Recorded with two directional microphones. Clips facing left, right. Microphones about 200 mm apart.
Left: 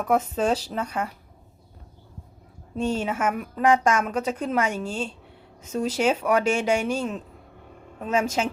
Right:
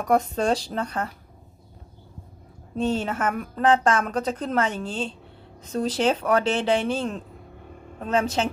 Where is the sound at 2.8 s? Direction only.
10° left (ahead or behind).